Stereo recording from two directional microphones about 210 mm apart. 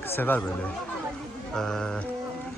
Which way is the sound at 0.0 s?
10° left (ahead or behind).